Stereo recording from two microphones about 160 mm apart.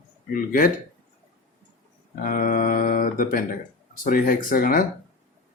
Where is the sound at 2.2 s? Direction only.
60° left (ahead or behind).